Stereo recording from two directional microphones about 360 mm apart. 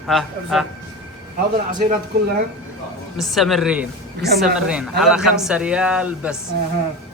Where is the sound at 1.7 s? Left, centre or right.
Right.